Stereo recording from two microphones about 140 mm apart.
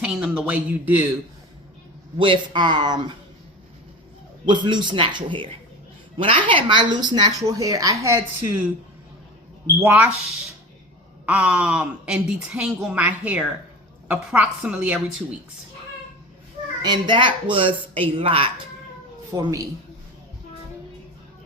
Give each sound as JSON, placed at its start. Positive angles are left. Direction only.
{"t": 0.0, "sound": "speech", "side_deg": -5}
{"t": 2.1, "sound": "a woman's voice", "side_deg": -35}
{"t": 4.4, "sound": "a woman's voice", "side_deg": -35}
{"t": 9.8, "sound": "speech", "side_deg": -10}
{"t": 11.3, "sound": "speech", "side_deg": -10}
{"t": 16.8, "sound": "a woman's voice", "side_deg": -30}
{"t": 19.3, "sound": "speech", "side_deg": -25}